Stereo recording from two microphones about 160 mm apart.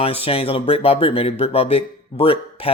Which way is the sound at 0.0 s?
35° left (ahead or behind).